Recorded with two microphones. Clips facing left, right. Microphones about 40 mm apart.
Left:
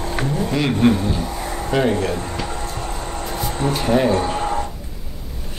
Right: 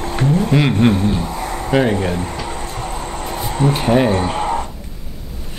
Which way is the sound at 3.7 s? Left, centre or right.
Right.